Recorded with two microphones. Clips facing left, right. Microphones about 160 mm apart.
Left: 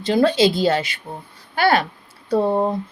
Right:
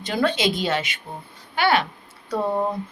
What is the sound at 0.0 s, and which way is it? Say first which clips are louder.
Speech: left 6 dB; 30° left (ahead or behind).